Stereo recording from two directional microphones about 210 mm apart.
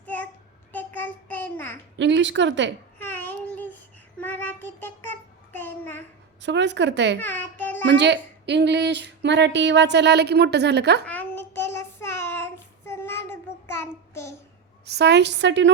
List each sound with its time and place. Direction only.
0.0 s a sound: 5° left (ahead or behind)
0.7 s child singing: 10° left (ahead or behind)
2.0 s a woman's voice: 60° right (ahead or behind)
3.0 s child singing: 10° left (ahead or behind)
6.4 s a woman's voice: 55° right (ahead or behind)
7.2 s a sound: 10° left (ahead or behind)
7.9 s a woman's voice: 55° right (ahead or behind)
11.0 s child singing: 10° left (ahead or behind)
14.8 s a woman's voice: 50° right (ahead or behind)